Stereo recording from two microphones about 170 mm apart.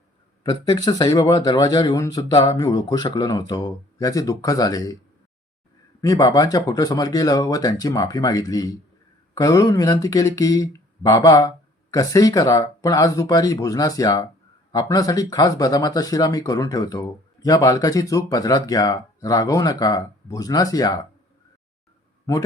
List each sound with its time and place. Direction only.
0.7 s speech: 25° left (ahead or behind)
6.0 s speech: 20° left (ahead or behind)